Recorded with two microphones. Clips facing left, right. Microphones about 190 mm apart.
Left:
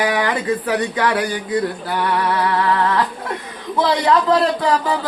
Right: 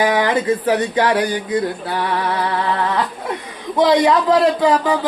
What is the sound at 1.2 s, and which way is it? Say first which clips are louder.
Speech: right 1 dB; 20° right (ahead or behind).